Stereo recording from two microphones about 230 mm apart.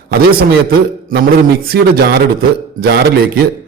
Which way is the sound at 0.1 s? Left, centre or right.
Right.